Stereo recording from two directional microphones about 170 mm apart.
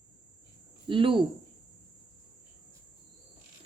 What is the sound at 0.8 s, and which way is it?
Speech, 30° right (ahead or behind).